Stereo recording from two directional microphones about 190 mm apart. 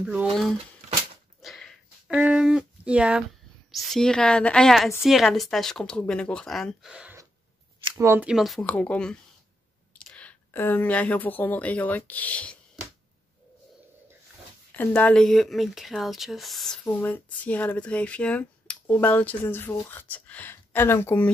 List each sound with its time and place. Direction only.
0.0 s speech: 5° right (ahead or behind)
1.4 s dog: centre (ahead or behind)
2.1 s speech: 5° right (ahead or behind)
7.8 s a sound: 25° right (ahead or behind)
8.1 s speech: 5° right (ahead or behind)
14.8 s speech: 10° left (ahead or behind)